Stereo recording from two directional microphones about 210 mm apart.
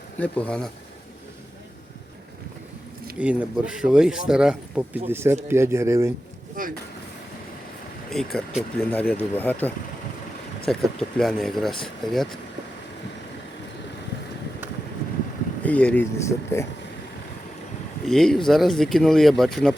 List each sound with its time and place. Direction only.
0.2 s speech: 5° left (ahead or behind)
3.2 s speech: 5° right (ahead or behind)
6.6 s speech: 40° right (ahead or behind)
8.1 s speech: centre (ahead or behind)
15.6 s speech: 5° left (ahead or behind)
18.0 s speech: centre (ahead or behind)